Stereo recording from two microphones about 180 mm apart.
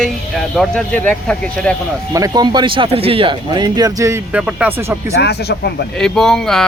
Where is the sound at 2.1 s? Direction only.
20° right (ahead or behind).